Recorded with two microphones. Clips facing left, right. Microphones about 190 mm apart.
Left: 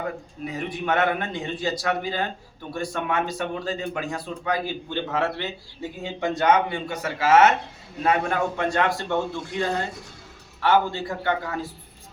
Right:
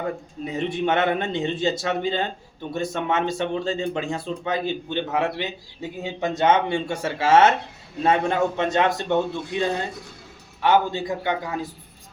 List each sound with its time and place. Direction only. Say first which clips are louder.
0.4 s a man's voice: right 4 dB; 25° right (ahead or behind)